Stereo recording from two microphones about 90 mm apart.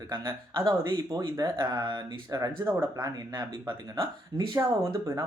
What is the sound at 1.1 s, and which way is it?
Speech, 45° right (ahead or behind).